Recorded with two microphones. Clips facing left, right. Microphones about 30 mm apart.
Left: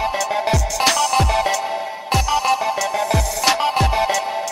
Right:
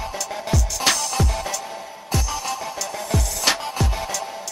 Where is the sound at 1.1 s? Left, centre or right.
Left.